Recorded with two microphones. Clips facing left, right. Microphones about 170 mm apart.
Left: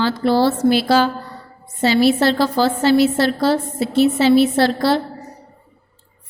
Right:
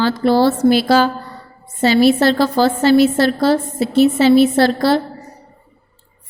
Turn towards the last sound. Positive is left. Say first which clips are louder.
# right 2 dB
turn(degrees=-50)  # may be behind; listen again after turning